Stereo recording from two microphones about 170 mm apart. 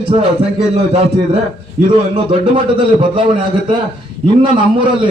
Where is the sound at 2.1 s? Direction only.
30° right (ahead or behind).